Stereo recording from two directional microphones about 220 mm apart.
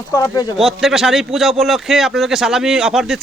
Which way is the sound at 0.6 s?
Centre (ahead or behind).